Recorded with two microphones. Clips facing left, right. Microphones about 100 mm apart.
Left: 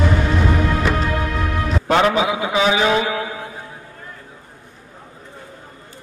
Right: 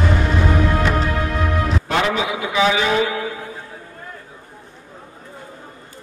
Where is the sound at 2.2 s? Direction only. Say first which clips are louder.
Left 1 dB; 25° left (ahead or behind).